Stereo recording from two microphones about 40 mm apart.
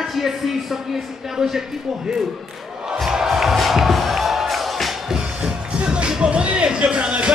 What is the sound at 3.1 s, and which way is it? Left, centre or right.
Music, centre.